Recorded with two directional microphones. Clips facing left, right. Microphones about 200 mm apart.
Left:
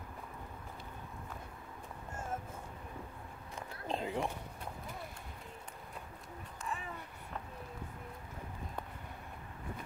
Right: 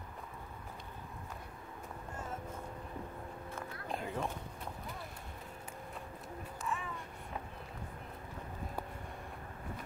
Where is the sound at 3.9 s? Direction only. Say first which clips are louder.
Left 3 dB; 20° left (ahead or behind).